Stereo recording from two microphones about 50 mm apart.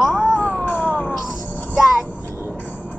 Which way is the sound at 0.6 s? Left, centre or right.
Left.